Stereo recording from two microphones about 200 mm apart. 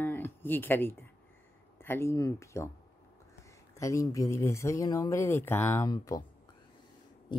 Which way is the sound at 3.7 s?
15° left (ahead or behind).